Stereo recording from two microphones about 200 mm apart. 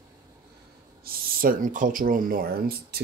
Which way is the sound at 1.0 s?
50° right (ahead or behind).